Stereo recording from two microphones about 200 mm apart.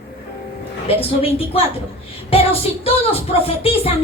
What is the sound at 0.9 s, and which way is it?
Speech, 30° left (ahead or behind).